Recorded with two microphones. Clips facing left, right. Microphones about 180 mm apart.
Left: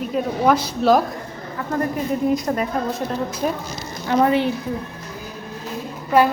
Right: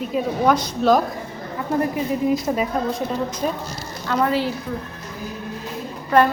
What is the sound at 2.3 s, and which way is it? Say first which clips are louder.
Speech: even; 5° right (ahead or behind).